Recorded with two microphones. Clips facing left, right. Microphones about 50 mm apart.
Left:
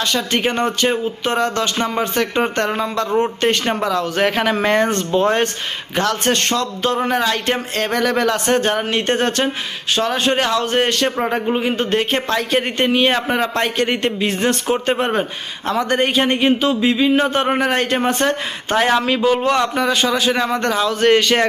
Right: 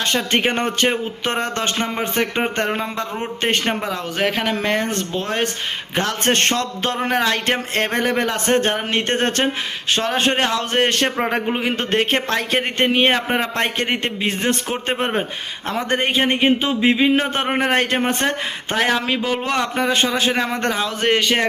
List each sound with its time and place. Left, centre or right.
0.0 s speech: right
2.0 s a man's voice: right
4.2 s speech: centre
6.0 s speech: right
7.5 s a man's voice: right
18.9 s a man's voice: centre
19.2 s a man's voice: right
21.1 s a man's voice: centre